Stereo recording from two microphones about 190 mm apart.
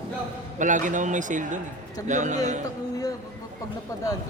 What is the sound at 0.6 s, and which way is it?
A man's voice, 40° right (ahead or behind).